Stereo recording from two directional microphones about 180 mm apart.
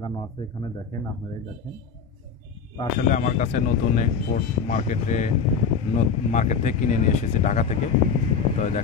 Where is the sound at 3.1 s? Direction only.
45° left (ahead or behind).